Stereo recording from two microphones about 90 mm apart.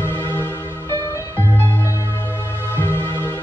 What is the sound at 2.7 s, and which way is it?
Music, 25° left (ahead or behind).